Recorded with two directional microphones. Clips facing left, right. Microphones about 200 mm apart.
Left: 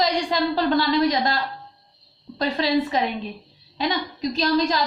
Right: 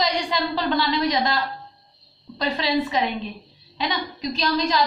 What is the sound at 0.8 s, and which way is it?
A woman's voice, 50° left (ahead or behind).